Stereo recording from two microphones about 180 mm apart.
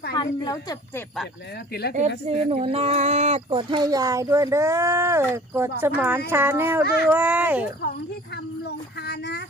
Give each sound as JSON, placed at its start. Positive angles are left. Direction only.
{"t": 0.1, "sound": "speech", "side_deg": 20}
{"t": 2.2, "sound": "speech", "side_deg": -35}
{"t": 9.0, "sound": "a sound", "side_deg": 65}